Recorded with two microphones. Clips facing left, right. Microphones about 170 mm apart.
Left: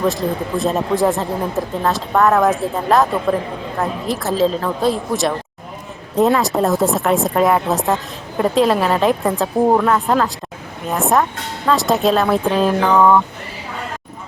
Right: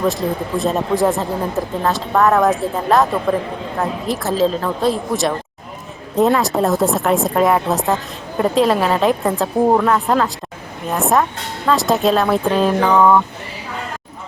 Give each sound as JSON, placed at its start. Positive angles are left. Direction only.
{"t": 0.0, "sound": "speech", "side_deg": 0}